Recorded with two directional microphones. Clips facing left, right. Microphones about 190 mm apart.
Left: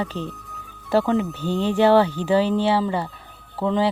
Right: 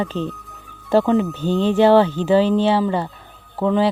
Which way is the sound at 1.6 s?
15° left (ahead or behind).